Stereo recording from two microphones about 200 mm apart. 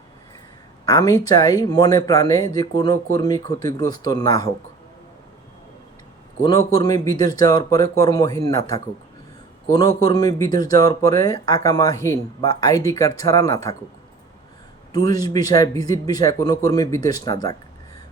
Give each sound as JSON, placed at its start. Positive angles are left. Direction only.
{"t": 0.9, "sound": "speech", "side_deg": 15}
{"t": 6.4, "sound": "speech", "side_deg": 20}
{"t": 14.9, "sound": "speech", "side_deg": 20}